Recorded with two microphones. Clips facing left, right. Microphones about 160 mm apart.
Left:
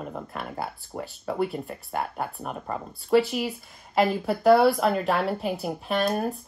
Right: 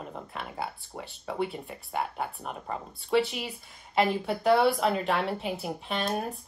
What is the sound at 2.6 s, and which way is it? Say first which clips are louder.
Speech: left 3 dB; 50° left (ahead or behind).